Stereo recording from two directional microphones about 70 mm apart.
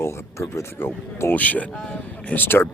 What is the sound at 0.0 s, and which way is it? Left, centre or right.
Speech, left.